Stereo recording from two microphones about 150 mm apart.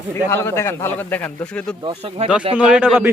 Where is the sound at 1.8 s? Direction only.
40° right (ahead or behind).